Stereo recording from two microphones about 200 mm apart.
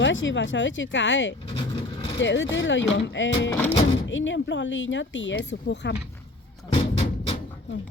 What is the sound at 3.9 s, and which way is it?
Speech, 70° left (ahead or behind).